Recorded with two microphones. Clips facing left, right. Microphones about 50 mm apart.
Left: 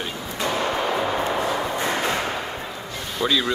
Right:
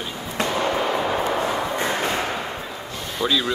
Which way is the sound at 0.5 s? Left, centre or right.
Centre.